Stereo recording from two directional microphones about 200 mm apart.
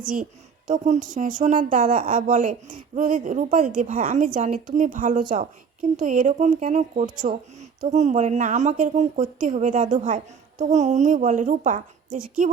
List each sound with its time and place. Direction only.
0.7 s speech: 40° right (ahead or behind)